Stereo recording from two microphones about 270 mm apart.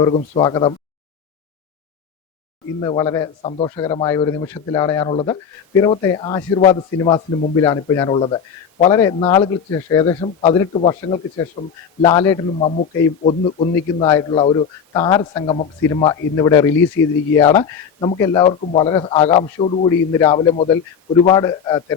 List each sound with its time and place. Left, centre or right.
0.0 s a man's voice: centre
2.8 s a man's voice: centre